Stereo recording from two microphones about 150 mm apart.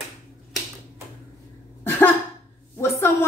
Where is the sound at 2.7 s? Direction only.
15° left (ahead or behind).